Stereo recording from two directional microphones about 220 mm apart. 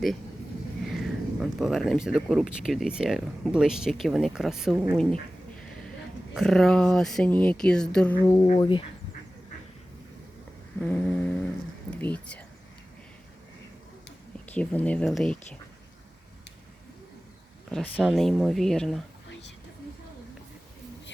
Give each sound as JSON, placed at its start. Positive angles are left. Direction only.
{"t": 0.9, "sound": "speech", "side_deg": 0}
{"t": 6.3, "sound": "speech", "side_deg": 0}
{"t": 8.2, "sound": "speech", "side_deg": 15}
{"t": 10.8, "sound": "speech", "side_deg": 5}
{"t": 14.4, "sound": "speech", "side_deg": 5}
{"t": 17.7, "sound": "speech", "side_deg": 0}